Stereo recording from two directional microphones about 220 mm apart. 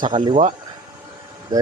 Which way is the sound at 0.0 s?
20° right (ahead or behind).